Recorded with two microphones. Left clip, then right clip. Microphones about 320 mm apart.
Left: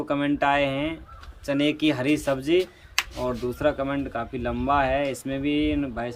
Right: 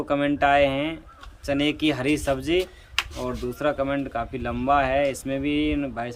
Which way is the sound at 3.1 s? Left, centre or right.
Centre.